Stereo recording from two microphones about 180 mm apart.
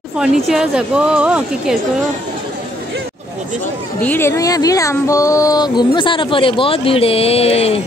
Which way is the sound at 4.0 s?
10° left (ahead or behind).